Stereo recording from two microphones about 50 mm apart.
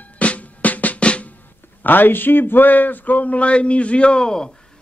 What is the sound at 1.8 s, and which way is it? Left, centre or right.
A man's voice, left.